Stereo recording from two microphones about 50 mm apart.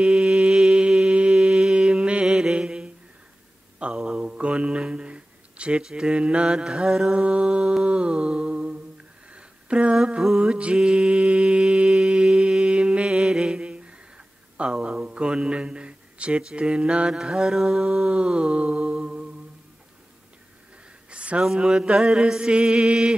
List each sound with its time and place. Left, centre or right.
0.0 s mantra: centre
7.8 s music: right
9.3 s a sound: right
9.9 s mantra: centre
10.5 s mantra: right
18.1 s mantra: centre
21.1 s a sound: right
21.5 s mantra: centre